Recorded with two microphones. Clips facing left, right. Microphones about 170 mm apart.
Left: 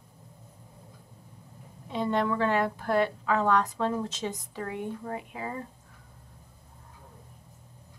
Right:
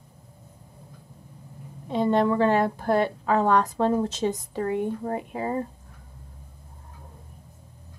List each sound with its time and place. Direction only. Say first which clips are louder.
1.9 s a woman's voice: right 6 dB; 35° right (ahead or behind)